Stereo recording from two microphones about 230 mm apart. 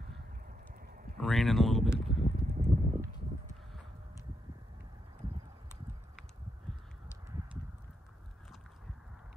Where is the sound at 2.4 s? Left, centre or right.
Right.